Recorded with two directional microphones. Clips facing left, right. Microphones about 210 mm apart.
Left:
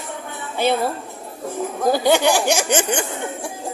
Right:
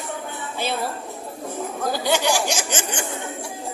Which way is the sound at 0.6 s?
55° left (ahead or behind).